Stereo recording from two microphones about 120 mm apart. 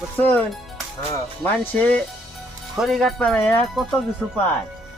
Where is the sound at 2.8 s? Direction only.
Centre (ahead or behind).